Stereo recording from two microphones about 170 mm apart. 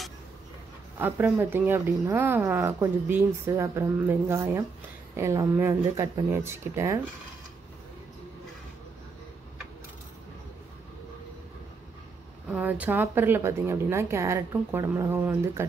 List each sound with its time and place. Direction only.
0.9 s a woman's voice: 10° right (ahead or behind)
12.4 s a woman's voice: 10° right (ahead or behind)